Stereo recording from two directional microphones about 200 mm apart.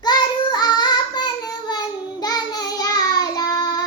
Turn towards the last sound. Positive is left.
turn(degrees=20)  # may be behind; listen again after turning